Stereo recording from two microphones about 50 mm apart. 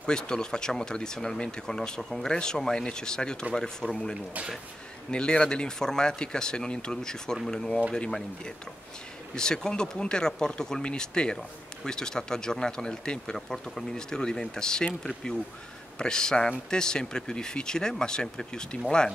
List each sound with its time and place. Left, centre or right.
0.0 s speech: centre
9.3 s speech: centre
16.0 s speech: centre